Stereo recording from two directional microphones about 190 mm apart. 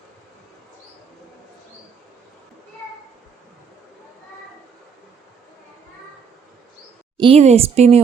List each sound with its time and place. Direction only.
7.2 s a woman's voice: 30° right (ahead or behind)